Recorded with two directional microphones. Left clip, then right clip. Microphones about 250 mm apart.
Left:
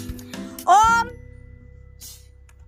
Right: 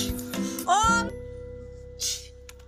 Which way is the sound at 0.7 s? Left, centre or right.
Centre.